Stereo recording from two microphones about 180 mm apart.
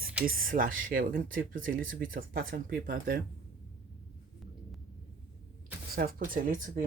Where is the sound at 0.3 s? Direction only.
50° right (ahead or behind).